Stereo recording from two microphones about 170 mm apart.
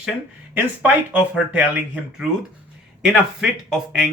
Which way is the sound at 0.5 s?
10° right (ahead or behind).